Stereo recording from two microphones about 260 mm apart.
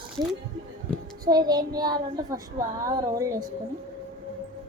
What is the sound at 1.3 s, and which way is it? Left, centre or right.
Speech, centre.